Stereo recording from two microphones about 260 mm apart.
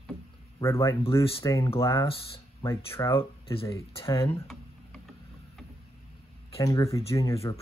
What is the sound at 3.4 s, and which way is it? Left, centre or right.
Speech, left.